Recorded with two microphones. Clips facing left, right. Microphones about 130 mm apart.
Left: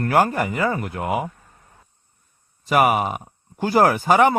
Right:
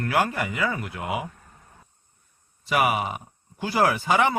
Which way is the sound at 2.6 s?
45° left (ahead or behind).